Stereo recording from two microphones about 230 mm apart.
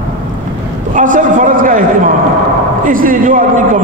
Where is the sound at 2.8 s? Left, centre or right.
Right.